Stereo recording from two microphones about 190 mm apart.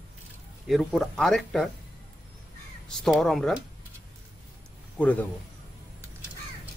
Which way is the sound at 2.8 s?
Centre (ahead or behind).